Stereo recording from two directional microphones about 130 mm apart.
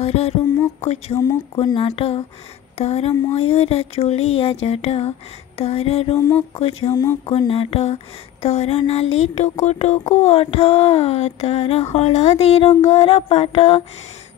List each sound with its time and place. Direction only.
0.0 s a sound: 50° left (ahead or behind)
0.7 s mantra: 50° left (ahead or behind)
1.6 s speech: 45° left (ahead or behind)